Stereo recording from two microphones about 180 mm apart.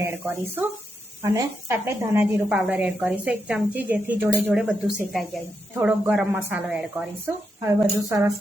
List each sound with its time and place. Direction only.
0.0 s a woman's voice: 10° right (ahead or behind)